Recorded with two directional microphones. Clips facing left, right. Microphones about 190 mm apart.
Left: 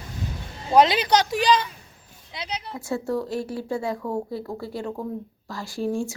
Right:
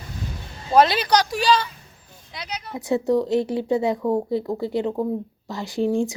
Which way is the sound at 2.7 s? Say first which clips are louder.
Right 7 dB; 20° right (ahead or behind).